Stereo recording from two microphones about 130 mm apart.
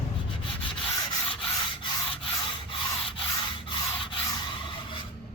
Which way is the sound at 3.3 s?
40° left (ahead or behind).